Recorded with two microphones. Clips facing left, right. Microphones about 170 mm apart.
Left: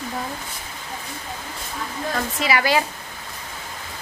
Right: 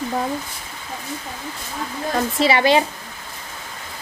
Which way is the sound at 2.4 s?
25° right (ahead or behind).